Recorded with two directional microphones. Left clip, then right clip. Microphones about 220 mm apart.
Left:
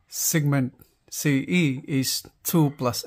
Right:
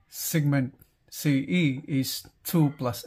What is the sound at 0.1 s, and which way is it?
Speech, 25° left (ahead or behind).